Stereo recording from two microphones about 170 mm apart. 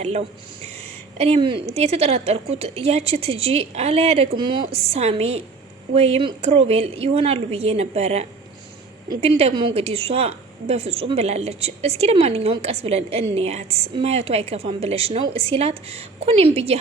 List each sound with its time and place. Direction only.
0.0 s a woman's voice: 40° right (ahead or behind)